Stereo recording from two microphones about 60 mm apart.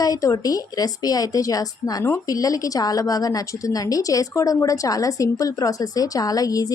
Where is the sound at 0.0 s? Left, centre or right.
Left.